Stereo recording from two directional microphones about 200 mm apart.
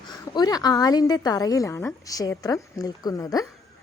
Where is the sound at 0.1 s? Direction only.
20° left (ahead or behind).